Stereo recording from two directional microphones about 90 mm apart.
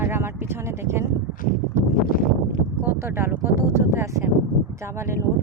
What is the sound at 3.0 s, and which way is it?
Speech, 25° right (ahead or behind).